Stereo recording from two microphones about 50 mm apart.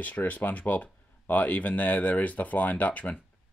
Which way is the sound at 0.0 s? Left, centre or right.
Left.